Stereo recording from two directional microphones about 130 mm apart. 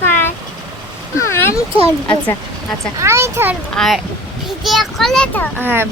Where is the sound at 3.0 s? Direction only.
20° right (ahead or behind).